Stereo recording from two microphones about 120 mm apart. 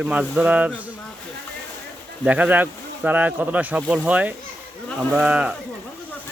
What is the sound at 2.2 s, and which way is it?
Speech, 10° right (ahead or behind).